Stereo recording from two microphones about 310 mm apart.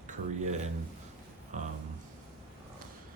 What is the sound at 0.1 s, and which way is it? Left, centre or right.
Speech, right.